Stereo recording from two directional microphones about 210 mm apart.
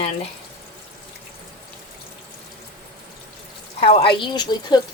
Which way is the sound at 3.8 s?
25° left (ahead or behind).